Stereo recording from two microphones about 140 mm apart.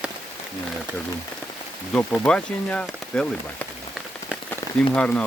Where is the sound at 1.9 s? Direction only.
10° left (ahead or behind).